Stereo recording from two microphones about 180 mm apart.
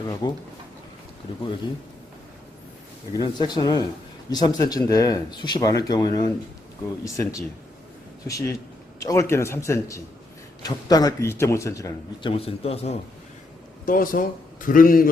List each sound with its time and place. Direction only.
0.1 s speech: 20° left (ahead or behind)
3.2 s a man's voice: 25° left (ahead or behind)
12.3 s speech: 30° left (ahead or behind)
13.8 s a man's voice: 50° left (ahead or behind)